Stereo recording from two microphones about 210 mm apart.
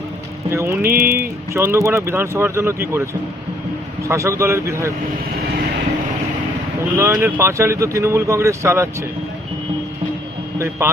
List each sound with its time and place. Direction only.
0.5 s speech: 10° right (ahead or behind)
0.8 s a sound: 45° right (ahead or behind)
1.5 s speech: 15° right (ahead or behind)
4.1 s speech: 15° right (ahead or behind)
6.9 s speech: 10° right (ahead or behind)